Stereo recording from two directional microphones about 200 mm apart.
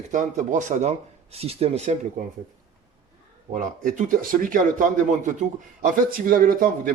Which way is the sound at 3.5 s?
40° right (ahead or behind).